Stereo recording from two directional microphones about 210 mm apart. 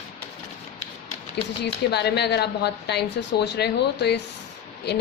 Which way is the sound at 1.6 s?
50° left (ahead or behind).